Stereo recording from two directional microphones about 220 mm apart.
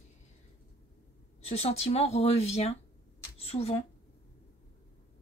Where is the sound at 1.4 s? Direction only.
30° left (ahead or behind).